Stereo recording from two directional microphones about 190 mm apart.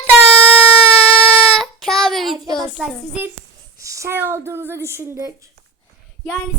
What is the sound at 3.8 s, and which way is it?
Speech, 15° right (ahead or behind).